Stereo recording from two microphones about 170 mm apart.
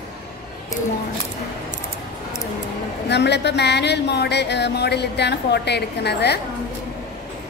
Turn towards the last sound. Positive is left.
turn(degrees=75)  # may be behind; listen again after turning